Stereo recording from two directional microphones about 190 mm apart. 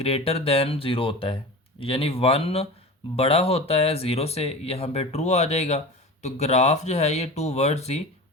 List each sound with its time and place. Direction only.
0.0 s speech: 30° left (ahead or behind)